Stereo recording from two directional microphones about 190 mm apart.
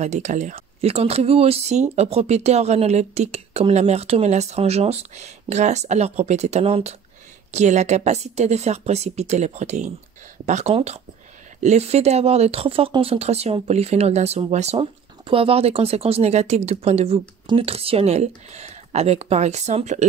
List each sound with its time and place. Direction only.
0.0 s speech: 40° right (ahead or behind)